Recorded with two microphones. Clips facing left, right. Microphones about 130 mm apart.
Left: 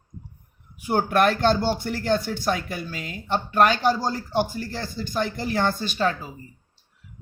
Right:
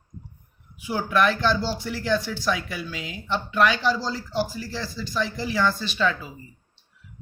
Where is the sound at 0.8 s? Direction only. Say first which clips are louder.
Left 2 dB; 55° left (ahead or behind).